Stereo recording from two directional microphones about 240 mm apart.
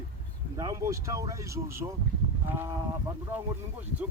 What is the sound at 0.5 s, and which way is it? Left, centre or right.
Speech, centre.